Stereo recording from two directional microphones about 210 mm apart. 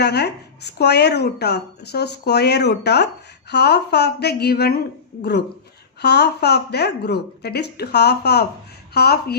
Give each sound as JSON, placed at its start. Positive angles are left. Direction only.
{"t": 0.0, "sound": "speech", "side_deg": 50}
{"t": 6.0, "sound": "speech", "side_deg": 50}